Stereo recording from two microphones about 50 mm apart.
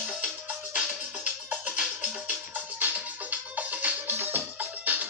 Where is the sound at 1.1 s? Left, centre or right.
Right.